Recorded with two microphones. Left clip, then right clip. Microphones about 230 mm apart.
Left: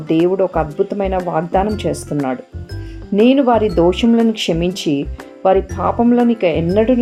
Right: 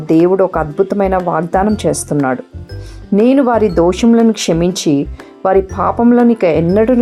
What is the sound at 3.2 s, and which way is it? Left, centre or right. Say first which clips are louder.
Speech: right 1 dB; right.